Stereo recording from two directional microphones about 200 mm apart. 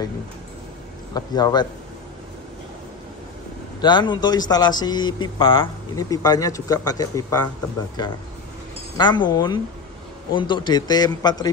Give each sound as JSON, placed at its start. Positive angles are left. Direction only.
{"t": 1.1, "sound": "speech", "side_deg": 20}
{"t": 3.8, "sound": "speech", "side_deg": 20}
{"t": 8.9, "sound": "speech", "side_deg": 20}